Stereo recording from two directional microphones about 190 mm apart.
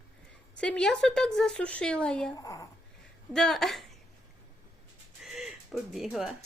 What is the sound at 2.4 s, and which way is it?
Speech, 20° left (ahead or behind).